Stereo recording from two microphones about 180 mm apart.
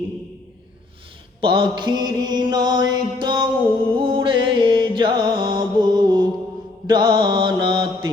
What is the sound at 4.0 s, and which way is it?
Music, 30° right (ahead or behind).